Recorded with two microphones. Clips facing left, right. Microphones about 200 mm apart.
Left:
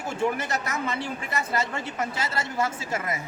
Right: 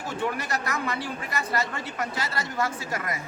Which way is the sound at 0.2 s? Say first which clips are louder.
Left 3 dB; 25° left (ahead or behind).